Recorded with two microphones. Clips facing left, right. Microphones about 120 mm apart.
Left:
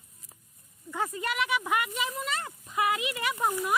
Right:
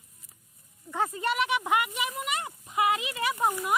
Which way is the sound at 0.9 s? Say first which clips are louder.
Right 3 dB; 25° right (ahead or behind).